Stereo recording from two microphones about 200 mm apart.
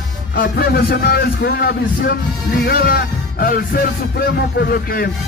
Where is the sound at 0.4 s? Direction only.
50° left (ahead or behind).